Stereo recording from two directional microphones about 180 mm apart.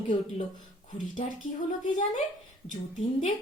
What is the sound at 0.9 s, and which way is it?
A woman's voice, 45° left (ahead or behind).